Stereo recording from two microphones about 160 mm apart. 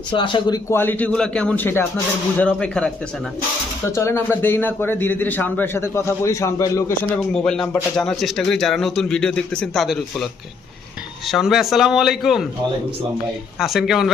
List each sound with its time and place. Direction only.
0.1 s a man's voice: 30° left (ahead or behind)
0.7 s a man's voice: 15° left (ahead or behind)
3.9 s a man's voice: 15° left (ahead or behind)
7.2 s speech: 5° left (ahead or behind)
11.3 s speech: centre (ahead or behind)
13.6 s speech: centre (ahead or behind)